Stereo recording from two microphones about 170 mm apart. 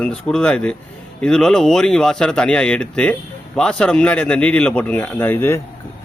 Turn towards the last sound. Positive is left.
turn(degrees=15)  # may be behind; listen again after turning